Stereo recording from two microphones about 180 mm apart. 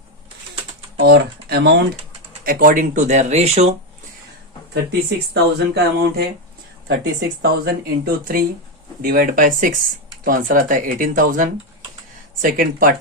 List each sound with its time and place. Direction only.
1.0 s speech: 60° right (ahead or behind)
2.4 s speech: 50° right (ahead or behind)
4.7 s speech: 70° right (ahead or behind); by 12.9 s 50° right (ahead or behind)